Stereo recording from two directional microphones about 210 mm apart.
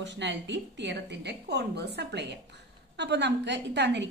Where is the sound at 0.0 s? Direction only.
55° right (ahead or behind).